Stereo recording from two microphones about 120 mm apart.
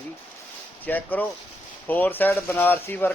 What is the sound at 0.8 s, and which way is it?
Speech, 15° left (ahead or behind).